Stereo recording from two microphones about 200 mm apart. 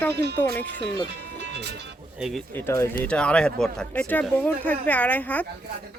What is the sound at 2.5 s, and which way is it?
Speech, 15° left (ahead or behind).